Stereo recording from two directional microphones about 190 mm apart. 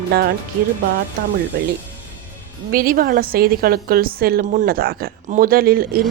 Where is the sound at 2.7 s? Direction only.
50° right (ahead or behind).